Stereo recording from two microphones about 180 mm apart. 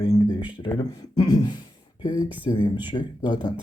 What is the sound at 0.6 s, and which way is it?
Speech, 25° left (ahead or behind).